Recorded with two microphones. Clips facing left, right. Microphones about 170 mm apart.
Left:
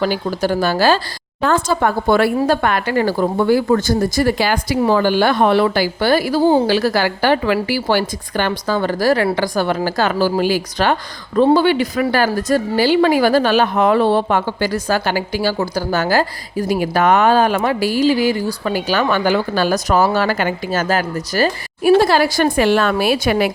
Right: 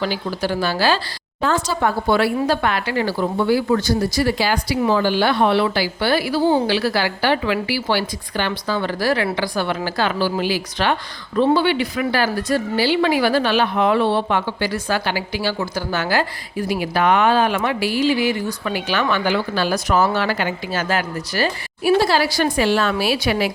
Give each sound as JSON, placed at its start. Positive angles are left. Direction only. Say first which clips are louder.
{"t": 0.0, "sound": "speech", "louder": "left 4 dB", "side_deg": 45}